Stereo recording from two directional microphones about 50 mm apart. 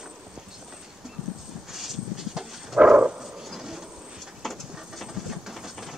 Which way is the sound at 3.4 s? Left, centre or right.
Centre.